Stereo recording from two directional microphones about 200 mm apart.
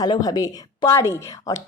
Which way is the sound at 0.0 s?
20° left (ahead or behind).